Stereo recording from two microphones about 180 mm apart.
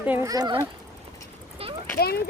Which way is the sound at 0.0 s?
15° right (ahead or behind).